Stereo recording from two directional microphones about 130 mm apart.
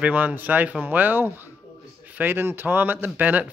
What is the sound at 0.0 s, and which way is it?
A man's voice, 10° right (ahead or behind).